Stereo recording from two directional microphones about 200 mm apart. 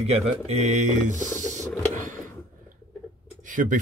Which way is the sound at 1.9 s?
40° right (ahead or behind).